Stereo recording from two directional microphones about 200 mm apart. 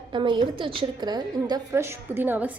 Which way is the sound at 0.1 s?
25° right (ahead or behind).